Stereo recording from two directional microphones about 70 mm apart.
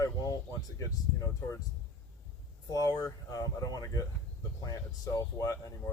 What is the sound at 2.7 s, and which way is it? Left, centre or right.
Speech, left.